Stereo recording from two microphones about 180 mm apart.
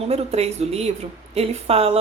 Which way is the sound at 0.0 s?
35° right (ahead or behind).